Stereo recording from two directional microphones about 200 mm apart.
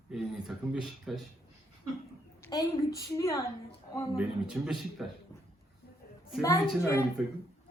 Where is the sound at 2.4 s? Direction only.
15° left (ahead or behind).